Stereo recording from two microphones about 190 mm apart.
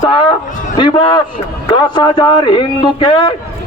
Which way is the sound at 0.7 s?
25° left (ahead or behind).